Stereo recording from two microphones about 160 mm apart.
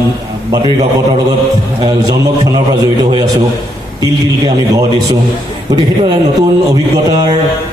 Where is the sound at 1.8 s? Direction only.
25° right (ahead or behind).